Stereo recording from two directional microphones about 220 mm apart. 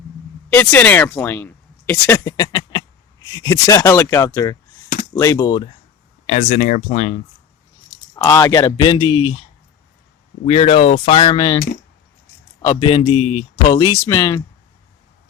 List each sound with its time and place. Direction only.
0.5 s speech: 10° left (ahead or behind)
6.2 s speech: 35° left (ahead or behind)
7.9 s speech: 15° left (ahead or behind)
10.4 s a man's voice: 30° left (ahead or behind)
12.6 s a man's voice: 25° left (ahead or behind)